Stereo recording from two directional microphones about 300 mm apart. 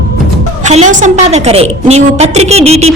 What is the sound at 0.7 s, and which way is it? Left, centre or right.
A woman's voice, right.